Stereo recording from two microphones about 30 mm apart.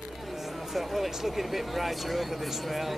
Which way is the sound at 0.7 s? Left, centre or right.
Centre.